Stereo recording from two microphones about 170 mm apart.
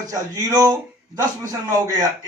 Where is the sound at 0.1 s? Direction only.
20° right (ahead or behind).